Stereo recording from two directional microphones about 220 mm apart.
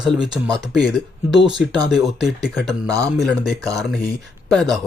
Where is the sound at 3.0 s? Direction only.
Centre (ahead or behind).